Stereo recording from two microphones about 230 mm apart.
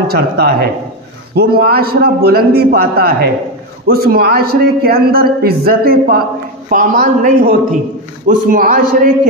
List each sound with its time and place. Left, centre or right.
0.1 s a man's voice: right